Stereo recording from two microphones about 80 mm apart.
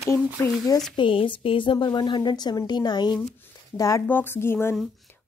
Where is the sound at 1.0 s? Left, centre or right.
Left.